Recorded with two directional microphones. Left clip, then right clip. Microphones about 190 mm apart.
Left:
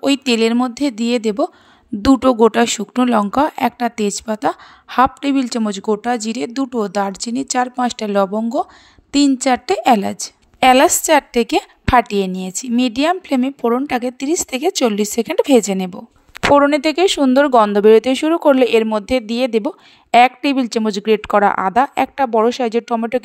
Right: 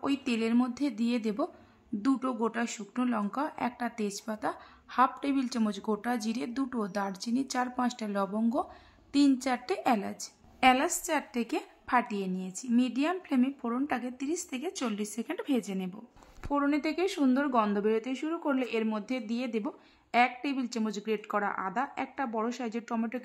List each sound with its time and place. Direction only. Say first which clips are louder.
0.0 s speech: left 16 dB; 50° left (ahead or behind)
9.4 s a woman's voice: left 15 dB; 40° left (ahead or behind)